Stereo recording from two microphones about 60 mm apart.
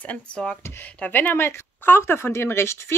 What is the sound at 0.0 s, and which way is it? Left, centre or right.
Speech, left.